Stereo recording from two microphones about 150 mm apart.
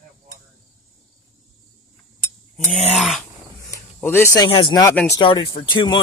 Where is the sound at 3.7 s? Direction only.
15° left (ahead or behind).